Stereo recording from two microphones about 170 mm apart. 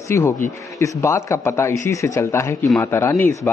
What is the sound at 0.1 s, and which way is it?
A man's voice, 15° left (ahead or behind).